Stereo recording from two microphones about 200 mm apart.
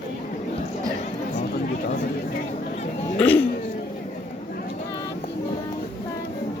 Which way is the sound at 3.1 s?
10° left (ahead or behind).